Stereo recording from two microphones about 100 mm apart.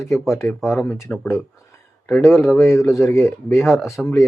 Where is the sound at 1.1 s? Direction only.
15° left (ahead or behind).